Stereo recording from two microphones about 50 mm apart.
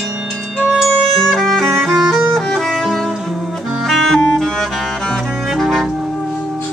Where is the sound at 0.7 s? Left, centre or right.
Centre.